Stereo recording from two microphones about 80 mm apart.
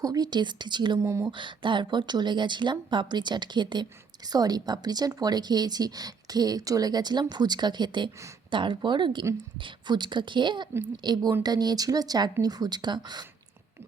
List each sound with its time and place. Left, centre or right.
0.0 s a woman's voice: right
1.0 s speech: right
1.3 s speech: right
8.4 s a woman's voice: right